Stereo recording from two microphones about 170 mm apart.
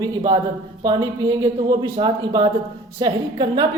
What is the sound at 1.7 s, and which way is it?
Speech, 25° right (ahead or behind).